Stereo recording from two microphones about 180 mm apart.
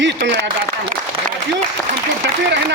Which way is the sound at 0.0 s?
90° right.